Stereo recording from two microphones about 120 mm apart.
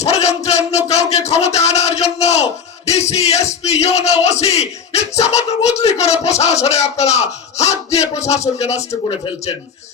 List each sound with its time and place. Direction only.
0.0 s speech: 65° left (ahead or behind)
9.0 s speech: 45° left (ahead or behind)